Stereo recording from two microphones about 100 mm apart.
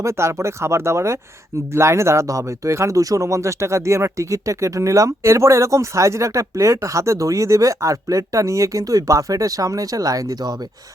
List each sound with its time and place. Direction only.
0.0 s speech: 30° right (ahead or behind)